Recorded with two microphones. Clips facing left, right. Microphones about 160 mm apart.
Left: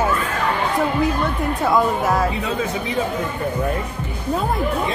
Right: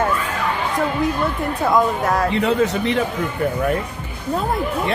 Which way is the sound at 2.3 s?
70° right (ahead or behind).